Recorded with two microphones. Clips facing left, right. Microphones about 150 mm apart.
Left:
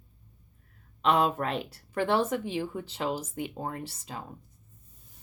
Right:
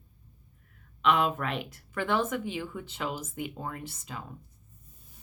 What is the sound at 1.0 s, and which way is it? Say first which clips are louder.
Speech: left 1 dB; 35° left (ahead or behind).